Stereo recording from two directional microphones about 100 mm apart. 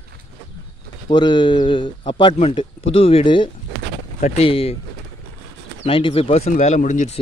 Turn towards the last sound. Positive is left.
turn(degrees=90)